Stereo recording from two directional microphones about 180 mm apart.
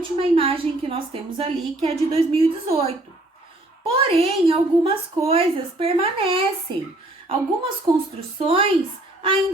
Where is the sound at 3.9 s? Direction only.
30° right (ahead or behind).